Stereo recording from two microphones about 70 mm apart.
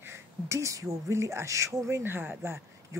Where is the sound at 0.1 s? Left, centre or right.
Right.